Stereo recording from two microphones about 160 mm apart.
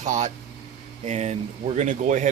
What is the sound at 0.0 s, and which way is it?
Speech, 50° right (ahead or behind).